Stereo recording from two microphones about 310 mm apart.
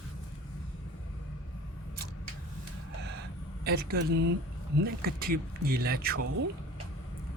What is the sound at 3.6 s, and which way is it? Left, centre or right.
Speech, right.